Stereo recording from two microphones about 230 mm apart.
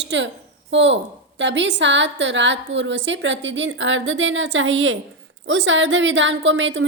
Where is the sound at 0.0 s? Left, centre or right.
Right.